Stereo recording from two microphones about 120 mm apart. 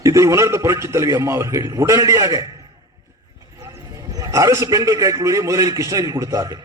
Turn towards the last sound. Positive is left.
turn(degrees=-30)  # may be behind; listen again after turning